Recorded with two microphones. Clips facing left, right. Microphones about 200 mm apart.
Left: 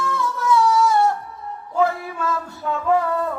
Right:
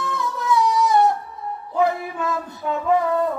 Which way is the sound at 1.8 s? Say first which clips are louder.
Even; 20° right (ahead or behind).